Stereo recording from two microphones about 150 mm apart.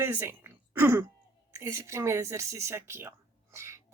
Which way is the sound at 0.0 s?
15° right (ahead or behind).